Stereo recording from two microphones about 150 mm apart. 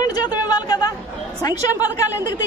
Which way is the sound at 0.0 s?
25° left (ahead or behind).